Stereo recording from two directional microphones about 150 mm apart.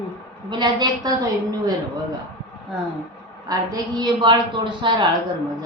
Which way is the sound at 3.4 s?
25° right (ahead or behind).